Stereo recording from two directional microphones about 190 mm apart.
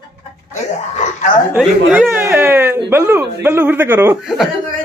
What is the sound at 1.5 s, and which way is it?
Speech, 5° right (ahead or behind).